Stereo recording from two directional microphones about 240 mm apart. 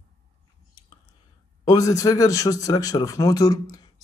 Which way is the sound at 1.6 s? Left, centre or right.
Centre.